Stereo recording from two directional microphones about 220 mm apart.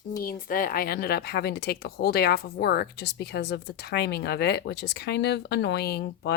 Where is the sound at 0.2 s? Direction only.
40° left (ahead or behind).